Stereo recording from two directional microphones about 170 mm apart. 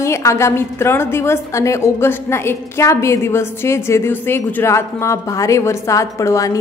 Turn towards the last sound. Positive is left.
turn(degrees=20)  # may be behind; listen again after turning